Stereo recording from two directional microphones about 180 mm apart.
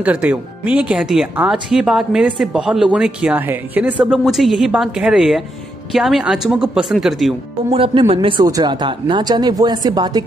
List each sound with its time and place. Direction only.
0.0 s speech: 5° right (ahead or behind)
7.7 s speech: 30° right (ahead or behind)